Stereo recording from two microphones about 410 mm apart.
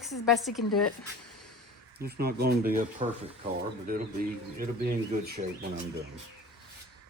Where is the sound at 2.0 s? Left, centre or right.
Right.